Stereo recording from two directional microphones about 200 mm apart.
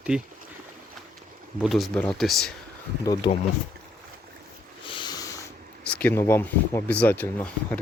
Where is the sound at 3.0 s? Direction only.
20° left (ahead or behind).